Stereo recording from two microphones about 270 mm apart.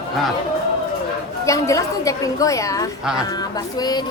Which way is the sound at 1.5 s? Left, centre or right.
Centre.